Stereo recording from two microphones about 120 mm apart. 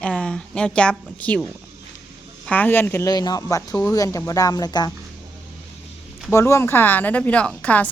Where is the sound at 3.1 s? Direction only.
35° left (ahead or behind).